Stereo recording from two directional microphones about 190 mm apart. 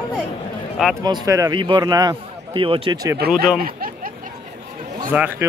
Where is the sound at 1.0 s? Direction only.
20° right (ahead or behind).